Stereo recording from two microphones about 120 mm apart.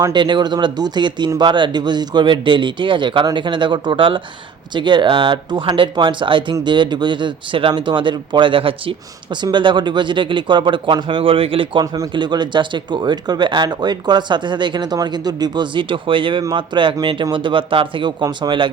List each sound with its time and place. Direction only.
0.0 s speech: 40° right (ahead or behind)